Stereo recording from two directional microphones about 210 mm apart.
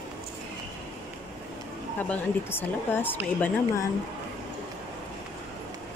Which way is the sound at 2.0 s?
10° left (ahead or behind).